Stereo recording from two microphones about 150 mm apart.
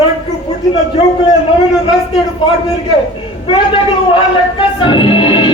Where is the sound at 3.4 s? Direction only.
35° left (ahead or behind).